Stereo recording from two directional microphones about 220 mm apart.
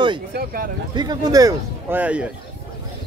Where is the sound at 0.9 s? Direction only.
20° right (ahead or behind).